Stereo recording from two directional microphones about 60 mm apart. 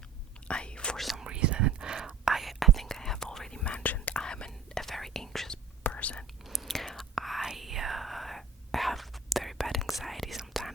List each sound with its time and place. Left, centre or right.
0.4 s whispering: centre
0.9 s whispering: centre
1.2 s whispering: centre; by 4.1 s left
4.1 s whispering: centre
5.9 s whispering: left
6.4 s whispering: centre